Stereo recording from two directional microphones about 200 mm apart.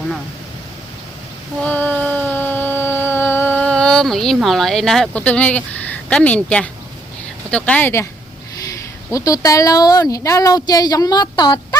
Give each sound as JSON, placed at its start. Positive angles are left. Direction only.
{"t": 1.6, "sound": "a sound", "side_deg": 10}
{"t": 7.5, "sound": "speech", "side_deg": 5}
{"t": 9.0, "sound": "speech", "side_deg": 15}